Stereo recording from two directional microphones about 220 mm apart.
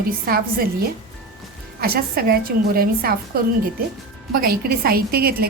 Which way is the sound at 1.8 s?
45° right (ahead or behind).